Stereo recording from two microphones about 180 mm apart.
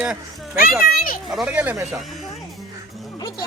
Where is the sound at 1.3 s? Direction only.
5° right (ahead or behind).